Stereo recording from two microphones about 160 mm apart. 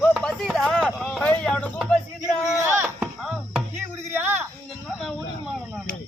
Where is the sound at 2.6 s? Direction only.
15° right (ahead or behind).